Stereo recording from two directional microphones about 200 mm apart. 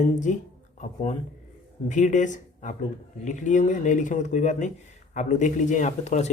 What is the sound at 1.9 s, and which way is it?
Speech, 40° left (ahead or behind).